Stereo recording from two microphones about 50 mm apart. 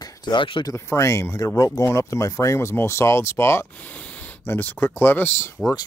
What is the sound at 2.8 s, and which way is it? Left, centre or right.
Speech, left.